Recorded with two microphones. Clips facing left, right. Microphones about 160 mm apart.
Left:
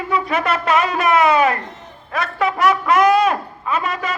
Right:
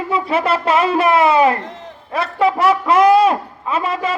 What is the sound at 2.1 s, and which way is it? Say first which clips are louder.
Speech: right 4 dB; 30° right (ahead or behind).